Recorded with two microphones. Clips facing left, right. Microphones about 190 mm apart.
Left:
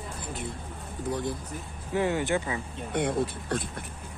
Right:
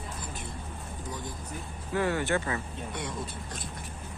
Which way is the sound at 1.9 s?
15° left (ahead or behind).